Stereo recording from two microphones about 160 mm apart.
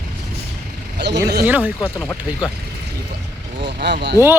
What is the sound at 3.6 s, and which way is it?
Speech, 90° right.